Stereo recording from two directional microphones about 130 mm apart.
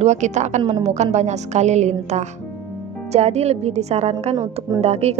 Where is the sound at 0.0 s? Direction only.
65° right (ahead or behind).